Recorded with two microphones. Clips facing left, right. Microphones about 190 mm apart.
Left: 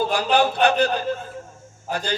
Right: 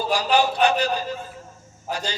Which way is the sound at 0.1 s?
55° left (ahead or behind).